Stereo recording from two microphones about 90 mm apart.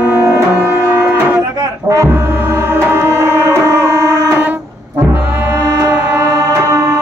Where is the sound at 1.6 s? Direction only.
35° right (ahead or behind).